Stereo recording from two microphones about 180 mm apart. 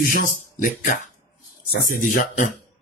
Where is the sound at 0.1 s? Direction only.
50° left (ahead or behind).